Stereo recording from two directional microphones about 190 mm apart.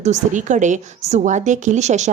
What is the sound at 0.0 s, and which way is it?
A woman's voice, 40° right (ahead or behind).